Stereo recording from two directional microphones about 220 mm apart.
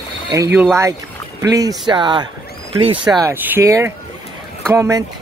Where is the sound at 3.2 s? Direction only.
10° right (ahead or behind).